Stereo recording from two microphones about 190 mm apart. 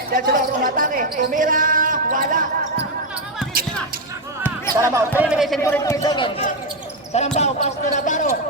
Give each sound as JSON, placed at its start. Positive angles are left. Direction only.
{"t": 0.1, "sound": "speech", "side_deg": -50}
{"t": 4.8, "sound": "speech", "side_deg": -10}
{"t": 5.6, "sound": "a man's voice", "side_deg": 15}
{"t": 7.1, "sound": "speech", "side_deg": 35}